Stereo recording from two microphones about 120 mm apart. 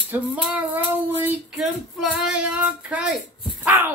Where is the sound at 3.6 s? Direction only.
15° right (ahead or behind).